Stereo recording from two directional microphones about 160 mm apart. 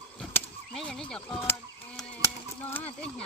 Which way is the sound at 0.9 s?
5° left (ahead or behind).